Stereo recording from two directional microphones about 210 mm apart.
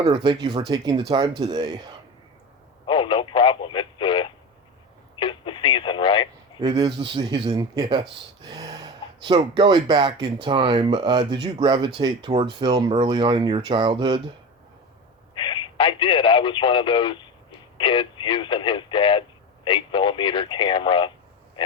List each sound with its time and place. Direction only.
0.0 s speech: 20° right (ahead or behind)
2.8 s a sound: 25° left (ahead or behind)
5.1 s radio: 25° left (ahead or behind)
6.6 s speech: 20° right (ahead or behind)
15.4 s radio: 20° left (ahead or behind)
17.7 s speech: 25° left (ahead or behind)